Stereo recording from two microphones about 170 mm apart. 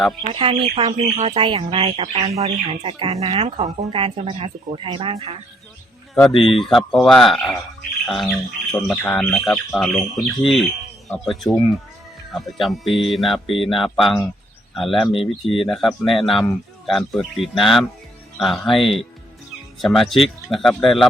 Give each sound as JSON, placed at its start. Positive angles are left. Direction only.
{"t": 0.3, "sound": "speech", "side_deg": -30}
{"t": 6.4, "sound": "speech", "side_deg": 0}